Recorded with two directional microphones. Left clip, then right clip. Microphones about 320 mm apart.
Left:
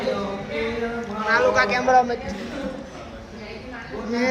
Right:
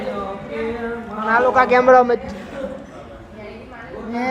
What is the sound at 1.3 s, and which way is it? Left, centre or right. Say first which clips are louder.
Speech: right 4 dB; centre.